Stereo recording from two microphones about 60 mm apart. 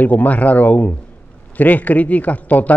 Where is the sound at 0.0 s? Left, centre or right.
Left.